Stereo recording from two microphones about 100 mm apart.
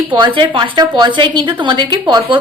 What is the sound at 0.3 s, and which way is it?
A woman's voice, 50° right (ahead or behind).